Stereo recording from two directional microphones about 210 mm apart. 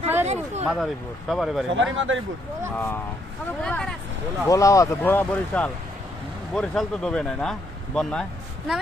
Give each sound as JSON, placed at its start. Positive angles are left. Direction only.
{"t": 0.6, "sound": "speech", "side_deg": 0}
{"t": 1.7, "sound": "speech", "side_deg": -65}
{"t": 2.7, "sound": "speech", "side_deg": 10}
{"t": 4.4, "sound": "speech", "side_deg": 15}